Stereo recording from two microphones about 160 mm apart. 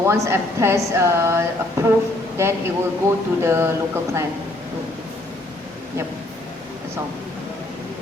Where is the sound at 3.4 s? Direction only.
15° right (ahead or behind).